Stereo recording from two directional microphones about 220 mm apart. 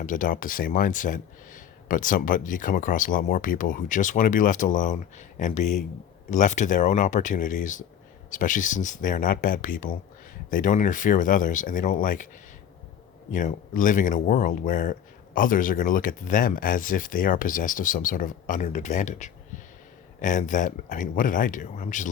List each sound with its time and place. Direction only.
0.0 s speech: 35° left (ahead or behind)
13.3 s speech: 35° left (ahead or behind)